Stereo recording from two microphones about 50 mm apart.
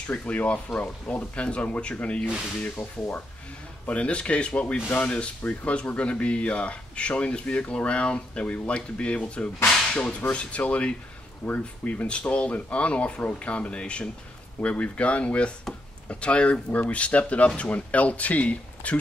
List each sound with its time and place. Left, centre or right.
0.0 s speech: left
3.8 s speech: left
4.7 s speech: left
5.0 s speech: left